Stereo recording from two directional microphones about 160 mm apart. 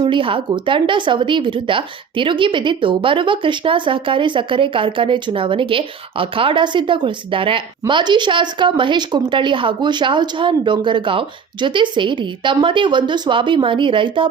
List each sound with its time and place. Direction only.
0.0 s speech: 30° right (ahead or behind)